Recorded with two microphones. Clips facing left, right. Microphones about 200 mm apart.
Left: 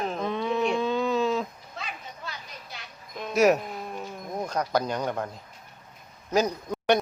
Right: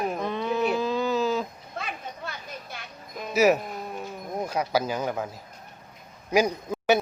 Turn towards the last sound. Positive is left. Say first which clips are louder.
# right 1 dB
turn(degrees=-5)  # may be behind; listen again after turning